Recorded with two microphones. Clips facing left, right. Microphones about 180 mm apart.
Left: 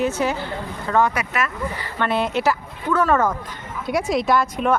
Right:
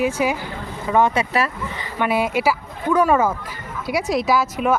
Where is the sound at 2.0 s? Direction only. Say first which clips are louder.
Right 2 dB; 10° right (ahead or behind).